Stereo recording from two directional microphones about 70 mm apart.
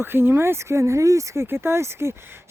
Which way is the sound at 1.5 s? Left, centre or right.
Right.